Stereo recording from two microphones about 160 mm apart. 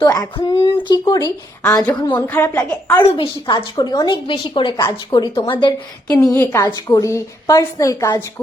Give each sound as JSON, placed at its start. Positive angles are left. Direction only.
{"t": 0.0, "sound": "a woman's voice", "side_deg": 25}
{"t": 2.2, "sound": "a woman's voice", "side_deg": 10}
{"t": 3.1, "sound": "a woman's voice", "side_deg": 30}
{"t": 6.1, "sound": "a woman's voice", "side_deg": 15}
{"t": 6.7, "sound": "a woman's voice", "side_deg": 25}